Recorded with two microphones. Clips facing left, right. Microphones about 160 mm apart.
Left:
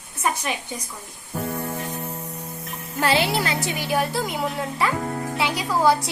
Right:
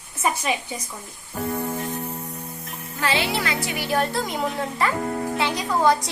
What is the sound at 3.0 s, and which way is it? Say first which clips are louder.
Speech: left 3 dB; 35° left (ahead or behind).